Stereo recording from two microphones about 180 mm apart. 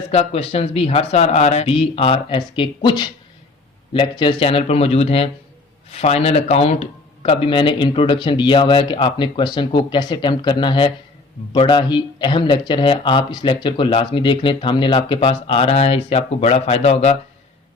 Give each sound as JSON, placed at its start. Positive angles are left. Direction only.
{"t": 0.1, "sound": "speech", "side_deg": 35}